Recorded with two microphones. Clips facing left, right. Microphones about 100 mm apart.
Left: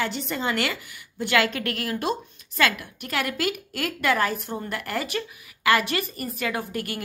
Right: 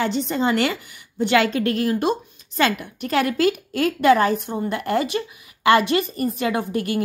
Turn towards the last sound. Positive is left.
turn(degrees=-25)  # may be behind; listen again after turning